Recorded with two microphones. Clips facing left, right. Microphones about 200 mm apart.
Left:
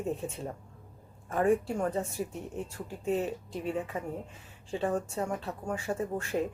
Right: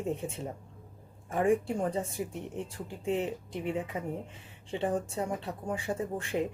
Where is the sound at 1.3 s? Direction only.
15° right (ahead or behind).